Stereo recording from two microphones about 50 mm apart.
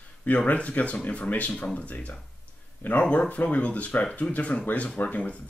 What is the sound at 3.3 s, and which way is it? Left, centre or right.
Speech, left.